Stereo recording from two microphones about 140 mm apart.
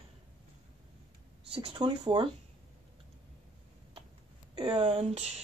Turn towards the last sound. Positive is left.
turn(degrees=-45)  # may be behind; listen again after turning